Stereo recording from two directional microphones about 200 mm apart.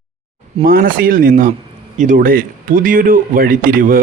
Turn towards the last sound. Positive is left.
turn(degrees=-45)  # may be behind; listen again after turning